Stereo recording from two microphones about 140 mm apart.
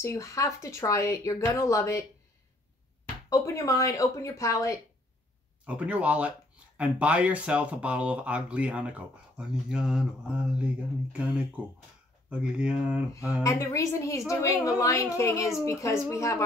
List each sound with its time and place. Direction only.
0.0 s speech: 20° left (ahead or behind)
3.3 s speech: 20° left (ahead or behind)
5.7 s speech: 10° right (ahead or behind)
13.4 s speech: 20° left (ahead or behind)